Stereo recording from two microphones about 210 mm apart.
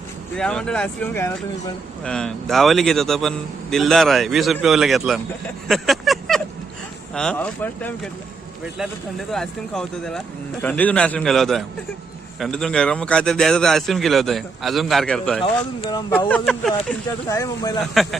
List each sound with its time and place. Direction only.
0.3 s speech: 5° left (ahead or behind)
9.3 s speech: centre (ahead or behind)
15.8 s speech: 20° left (ahead or behind)
17.2 s speech: 15° left (ahead or behind)
17.9 s speech: centre (ahead or behind)